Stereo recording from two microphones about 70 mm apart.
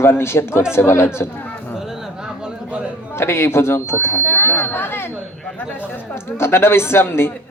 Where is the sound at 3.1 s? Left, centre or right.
Left.